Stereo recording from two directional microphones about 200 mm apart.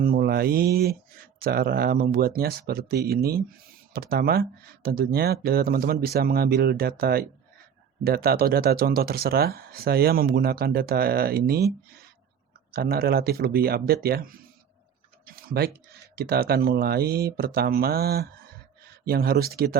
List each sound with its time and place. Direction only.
0.0 s speech: 50° right (ahead or behind)
12.7 s speech: 50° right (ahead or behind)
15.3 s tick-tock: 50° right (ahead or behind)
16.1 s speech: 50° right (ahead or behind)